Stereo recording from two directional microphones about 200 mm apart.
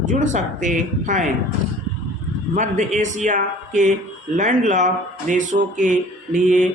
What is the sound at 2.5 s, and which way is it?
Speech, 35° right (ahead or behind).